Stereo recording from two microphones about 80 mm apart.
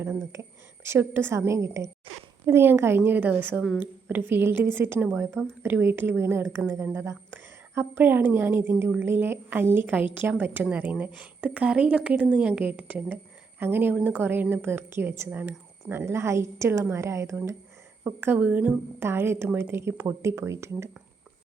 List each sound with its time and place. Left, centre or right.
0.9 s a woman's voice: right
18.3 s a woman's voice: centre
18.9 s a woman's voice: right